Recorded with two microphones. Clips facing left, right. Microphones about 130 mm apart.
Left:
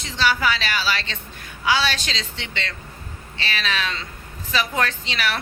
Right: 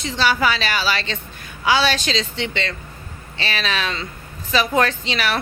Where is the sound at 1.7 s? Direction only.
20° right (ahead or behind).